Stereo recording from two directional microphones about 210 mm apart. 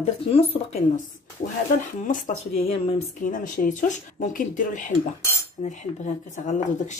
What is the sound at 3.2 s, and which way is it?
Speech, 40° left (ahead or behind).